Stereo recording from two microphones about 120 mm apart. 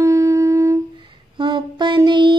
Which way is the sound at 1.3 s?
40° right (ahead or behind).